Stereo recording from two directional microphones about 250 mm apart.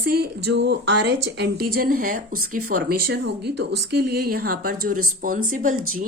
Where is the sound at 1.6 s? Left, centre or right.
Right.